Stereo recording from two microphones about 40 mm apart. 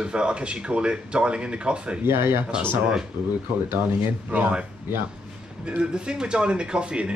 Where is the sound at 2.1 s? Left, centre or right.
Right.